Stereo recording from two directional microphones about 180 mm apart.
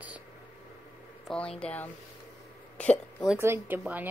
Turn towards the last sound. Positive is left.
turn(degrees=-10)  # may be behind; listen again after turning